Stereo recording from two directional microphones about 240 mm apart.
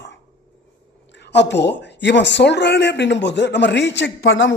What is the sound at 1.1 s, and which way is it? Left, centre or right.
Speech, left.